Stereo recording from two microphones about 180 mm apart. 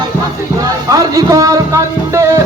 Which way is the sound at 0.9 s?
20° right (ahead or behind).